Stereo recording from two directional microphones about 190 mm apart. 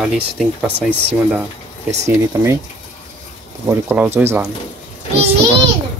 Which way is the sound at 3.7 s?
10° right (ahead or behind).